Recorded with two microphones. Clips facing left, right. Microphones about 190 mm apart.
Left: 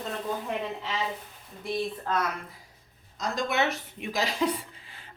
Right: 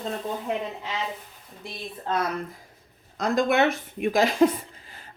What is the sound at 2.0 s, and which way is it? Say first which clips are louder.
Speech: right 7 dB; 25° right (ahead or behind).